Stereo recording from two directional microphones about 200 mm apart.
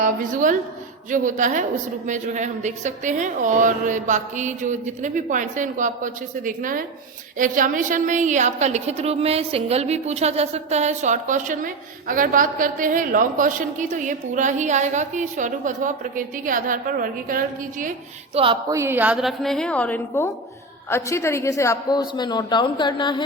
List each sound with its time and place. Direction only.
0.0 s a woman's voice: 40° right (ahead or behind)
18.3 s speech: 30° right (ahead or behind)
18.7 s a woman's voice: 10° right (ahead or behind); by 23.2 s 20° left (ahead or behind)